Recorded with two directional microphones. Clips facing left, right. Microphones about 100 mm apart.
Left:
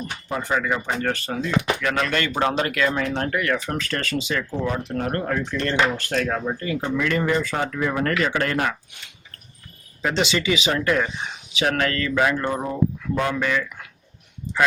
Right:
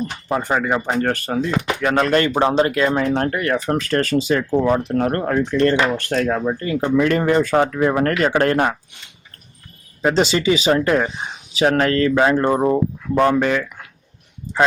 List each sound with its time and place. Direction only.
0.3 s speech: 45° right (ahead or behind)
1.5 s speech: 30° right (ahead or behind)
2.9 s speech: 40° right (ahead or behind)
10.0 s speech: 35° right (ahead or behind)